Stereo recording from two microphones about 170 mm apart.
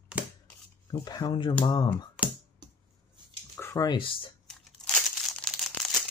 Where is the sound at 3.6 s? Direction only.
20° left (ahead or behind).